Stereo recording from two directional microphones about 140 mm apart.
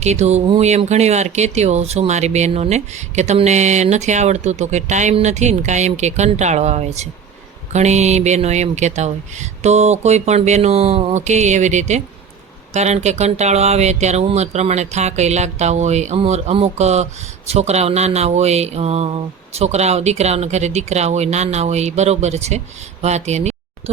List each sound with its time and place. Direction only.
0.0 s speech: 55° right (ahead or behind)